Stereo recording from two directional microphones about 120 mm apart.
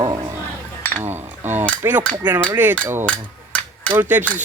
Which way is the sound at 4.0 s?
15° right (ahead or behind).